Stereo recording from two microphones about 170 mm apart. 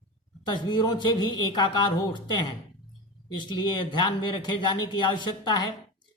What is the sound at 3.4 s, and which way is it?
A man's voice, 25° left (ahead or behind).